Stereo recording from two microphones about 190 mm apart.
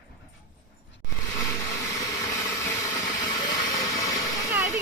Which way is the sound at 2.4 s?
15° left (ahead or behind).